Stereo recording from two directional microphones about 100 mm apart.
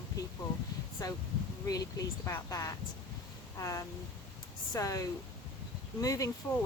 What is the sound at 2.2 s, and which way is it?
Speech, 30° left (ahead or behind).